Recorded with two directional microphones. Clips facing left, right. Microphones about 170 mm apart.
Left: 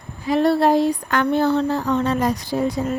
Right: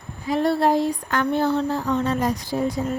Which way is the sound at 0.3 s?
80° left.